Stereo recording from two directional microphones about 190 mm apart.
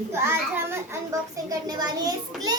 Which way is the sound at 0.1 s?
15° right (ahead or behind).